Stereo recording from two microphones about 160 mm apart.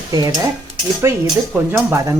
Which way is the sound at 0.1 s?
25° right (ahead or behind).